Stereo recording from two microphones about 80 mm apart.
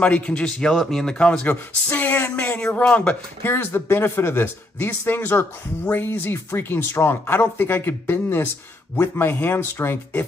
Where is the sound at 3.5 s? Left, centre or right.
Left.